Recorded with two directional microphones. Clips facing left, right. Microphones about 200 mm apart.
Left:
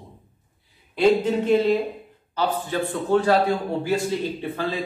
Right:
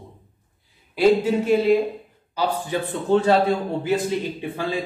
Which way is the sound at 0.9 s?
5° right (ahead or behind).